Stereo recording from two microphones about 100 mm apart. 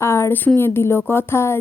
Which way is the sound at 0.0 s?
25° left (ahead or behind).